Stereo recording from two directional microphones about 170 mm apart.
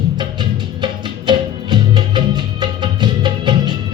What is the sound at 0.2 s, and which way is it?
Music, 25° right (ahead or behind).